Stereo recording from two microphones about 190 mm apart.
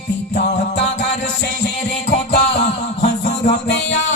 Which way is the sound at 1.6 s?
60° left (ahead or behind).